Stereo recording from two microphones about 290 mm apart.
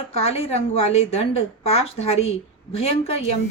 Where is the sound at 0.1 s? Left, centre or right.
Left.